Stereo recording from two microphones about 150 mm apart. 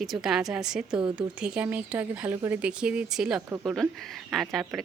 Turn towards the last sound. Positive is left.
turn(degrees=0)  # may be behind; listen again after turning